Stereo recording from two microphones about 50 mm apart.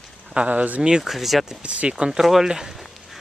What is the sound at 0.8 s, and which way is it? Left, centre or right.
Speech, centre.